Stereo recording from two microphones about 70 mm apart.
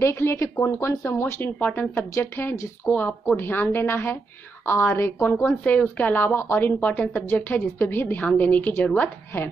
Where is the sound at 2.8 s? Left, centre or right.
Left.